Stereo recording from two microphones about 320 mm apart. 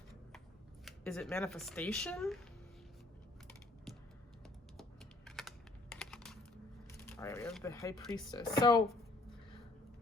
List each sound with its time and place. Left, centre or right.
0.9 s speech: centre
3.9 s typing: centre
7.2 s speech: centre